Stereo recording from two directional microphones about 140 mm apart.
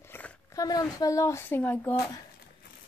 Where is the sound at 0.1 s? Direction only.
15° left (ahead or behind).